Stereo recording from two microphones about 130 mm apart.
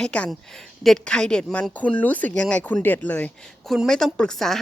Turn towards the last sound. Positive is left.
turn(degrees=5)  # may be behind; listen again after turning